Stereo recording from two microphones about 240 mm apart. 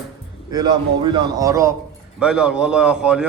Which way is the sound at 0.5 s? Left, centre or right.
Centre.